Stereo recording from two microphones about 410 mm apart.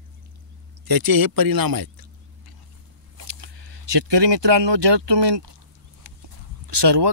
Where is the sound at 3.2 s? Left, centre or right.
Right.